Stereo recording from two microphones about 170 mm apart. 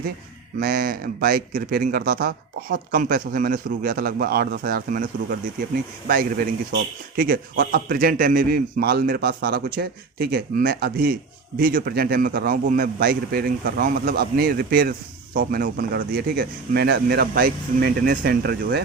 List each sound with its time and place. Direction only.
0.6 s a man's voice: 60° right (ahead or behind)
7.2 s a man's voice: 60° right (ahead or behind)